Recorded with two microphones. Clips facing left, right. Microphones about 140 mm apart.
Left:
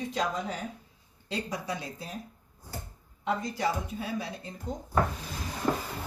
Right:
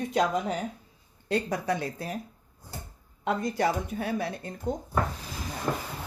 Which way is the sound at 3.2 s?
55° right (ahead or behind).